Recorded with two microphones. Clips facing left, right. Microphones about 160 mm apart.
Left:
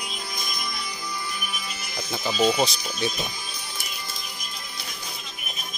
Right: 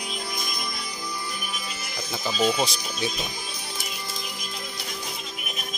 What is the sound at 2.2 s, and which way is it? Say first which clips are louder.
Speech: left 2 dB; 15° left (ahead or behind).